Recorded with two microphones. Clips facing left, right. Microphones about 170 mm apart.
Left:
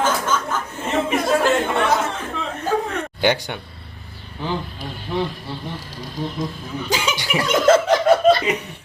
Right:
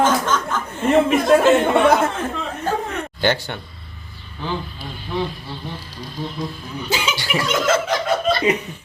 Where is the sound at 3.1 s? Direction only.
10° left (ahead or behind).